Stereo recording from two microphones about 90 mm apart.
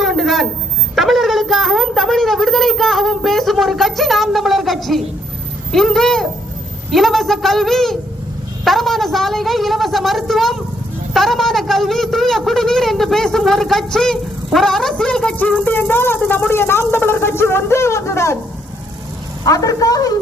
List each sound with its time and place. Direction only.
0.0 s a sound: centre (ahead or behind)
0.9 s speech: centre (ahead or behind)
16.5 s speech: 25° left (ahead or behind)
19.5 s a woman's voice: 40° left (ahead or behind)